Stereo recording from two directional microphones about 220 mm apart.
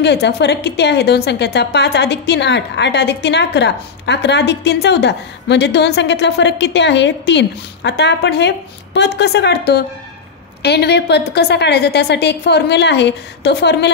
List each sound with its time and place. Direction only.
0.0 s a woman's voice: 50° left (ahead or behind)